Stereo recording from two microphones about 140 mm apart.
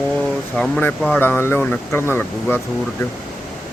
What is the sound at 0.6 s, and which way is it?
Speech, 5° left (ahead or behind).